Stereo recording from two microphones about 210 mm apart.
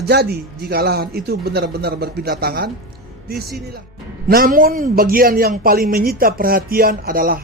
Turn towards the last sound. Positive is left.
turn(degrees=-45)  # may be behind; listen again after turning